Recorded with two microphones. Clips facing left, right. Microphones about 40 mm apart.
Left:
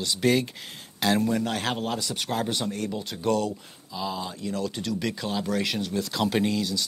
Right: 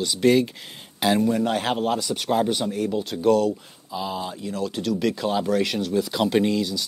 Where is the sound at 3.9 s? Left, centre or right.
Centre.